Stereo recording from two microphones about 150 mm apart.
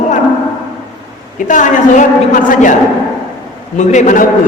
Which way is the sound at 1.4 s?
55° left (ahead or behind).